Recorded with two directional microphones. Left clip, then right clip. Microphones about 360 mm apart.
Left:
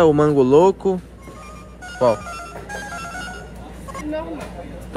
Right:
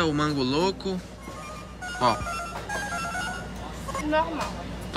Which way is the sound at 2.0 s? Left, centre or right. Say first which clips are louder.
Left 6 dB; centre.